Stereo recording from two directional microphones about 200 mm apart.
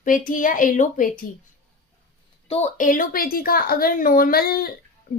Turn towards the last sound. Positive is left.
turn(degrees=50)  # may be behind; listen again after turning